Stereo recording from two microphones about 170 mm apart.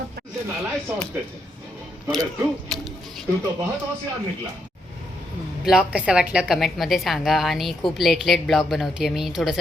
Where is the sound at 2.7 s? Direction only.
Centre (ahead or behind).